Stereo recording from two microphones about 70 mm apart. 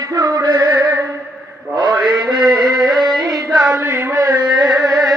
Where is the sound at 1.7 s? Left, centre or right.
Right.